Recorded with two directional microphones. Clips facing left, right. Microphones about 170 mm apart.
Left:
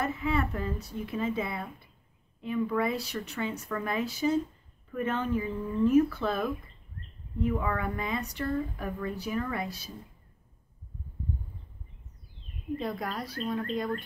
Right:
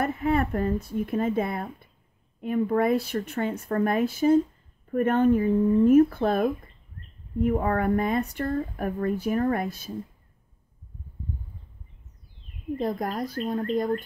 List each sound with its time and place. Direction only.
0.0 s speech: 50° right (ahead or behind)
12.7 s speech: 45° right (ahead or behind)